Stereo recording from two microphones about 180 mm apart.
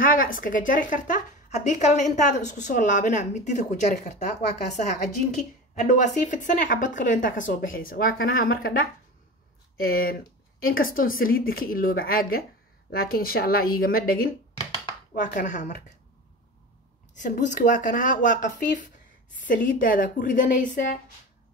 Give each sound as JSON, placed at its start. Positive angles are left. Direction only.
{"t": 0.0, "sound": "speech", "side_deg": 50}
{"t": 9.8, "sound": "a woman's voice", "side_deg": 55}
{"t": 17.2, "sound": "speech", "side_deg": 45}